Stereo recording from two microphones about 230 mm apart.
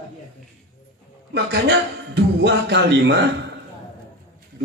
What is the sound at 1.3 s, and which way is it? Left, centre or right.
A man's voice, right.